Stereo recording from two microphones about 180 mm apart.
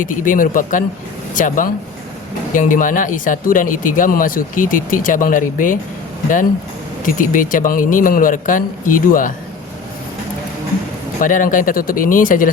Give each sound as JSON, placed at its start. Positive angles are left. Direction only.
{"t": 0.0, "sound": "speech", "side_deg": 50}
{"t": 7.0, "sound": "speech", "side_deg": 50}
{"t": 11.2, "sound": "speech", "side_deg": 45}